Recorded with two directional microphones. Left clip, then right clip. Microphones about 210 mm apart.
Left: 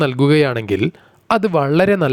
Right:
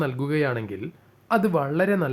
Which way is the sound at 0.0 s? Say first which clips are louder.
Left 10 dB; 45° left (ahead or behind).